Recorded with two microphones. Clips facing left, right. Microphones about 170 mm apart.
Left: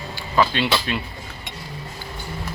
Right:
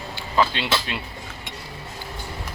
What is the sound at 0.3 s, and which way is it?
Speech, 20° right (ahead or behind).